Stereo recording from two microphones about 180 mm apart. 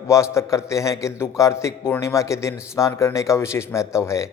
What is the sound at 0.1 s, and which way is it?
A man's voice, 15° left (ahead or behind).